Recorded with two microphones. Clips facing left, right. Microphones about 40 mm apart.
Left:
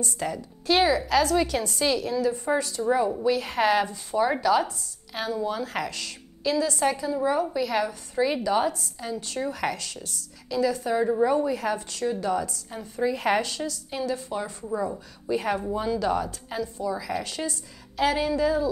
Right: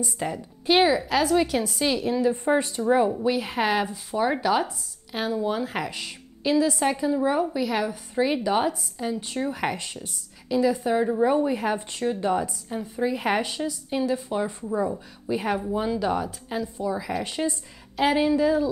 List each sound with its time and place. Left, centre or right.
0.0 s a woman's voice: right
2.0 s a woman's voice: right
3.3 s a woman's voice: centre
7.5 s a woman's voice: centre; by 12.5 s right
12.6 s a woman's voice: centre